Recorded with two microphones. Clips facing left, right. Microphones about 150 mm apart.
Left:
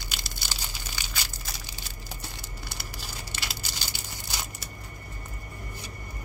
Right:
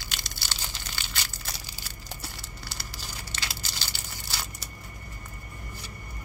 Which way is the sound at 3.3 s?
10° left (ahead or behind).